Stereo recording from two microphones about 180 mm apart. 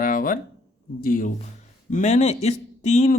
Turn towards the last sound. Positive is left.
turn(degrees=40)  # may be behind; listen again after turning